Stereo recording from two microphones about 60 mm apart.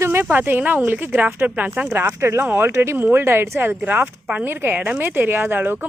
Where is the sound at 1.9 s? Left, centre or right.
Right.